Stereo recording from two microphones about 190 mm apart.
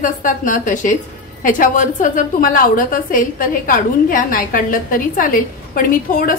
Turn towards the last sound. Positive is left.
turn(degrees=45)  # may be behind; listen again after turning